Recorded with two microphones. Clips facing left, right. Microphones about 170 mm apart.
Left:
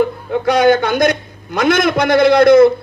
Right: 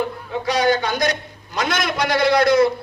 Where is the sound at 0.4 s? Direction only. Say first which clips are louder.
Left 7 dB; 55° left (ahead or behind).